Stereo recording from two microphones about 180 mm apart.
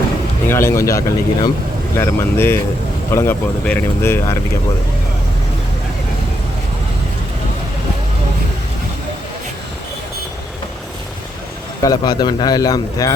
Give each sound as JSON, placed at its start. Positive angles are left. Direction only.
{"t": 0.4, "sound": "speech", "side_deg": 15}
{"t": 11.8, "sound": "a man's voice", "side_deg": 20}